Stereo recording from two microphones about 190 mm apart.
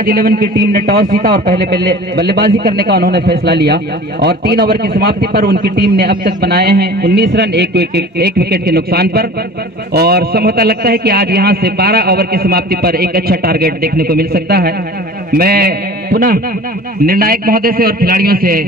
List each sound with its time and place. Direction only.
0.0 s a man's voice: 50° right (ahead or behind)
2.1 s a man's voice: 60° right (ahead or behind)